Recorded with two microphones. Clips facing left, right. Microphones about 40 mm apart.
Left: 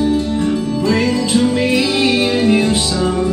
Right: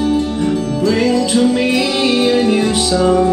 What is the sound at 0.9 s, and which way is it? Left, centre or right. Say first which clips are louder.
Music: right 2 dB; left.